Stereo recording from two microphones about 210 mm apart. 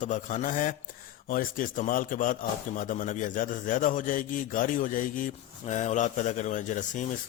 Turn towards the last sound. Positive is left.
turn(degrees=35)  # may be behind; listen again after turning